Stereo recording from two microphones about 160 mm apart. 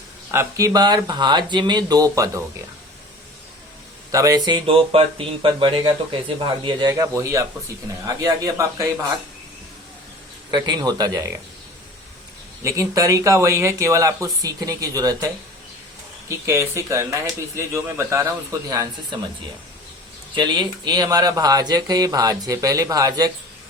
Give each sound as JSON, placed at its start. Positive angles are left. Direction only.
{"t": 0.3, "sound": "speech", "side_deg": -20}
{"t": 4.1, "sound": "speech", "side_deg": -20}
{"t": 10.5, "sound": "speech", "side_deg": -25}
{"t": 12.6, "sound": "speech", "side_deg": -20}
{"t": 16.5, "sound": "speech", "side_deg": -15}
{"t": 20.3, "sound": "speech", "side_deg": -30}